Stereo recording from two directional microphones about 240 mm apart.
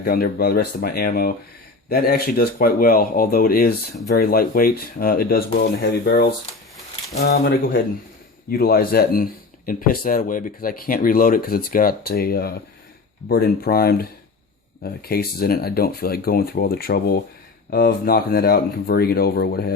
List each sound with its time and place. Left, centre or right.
0.0 s speech: left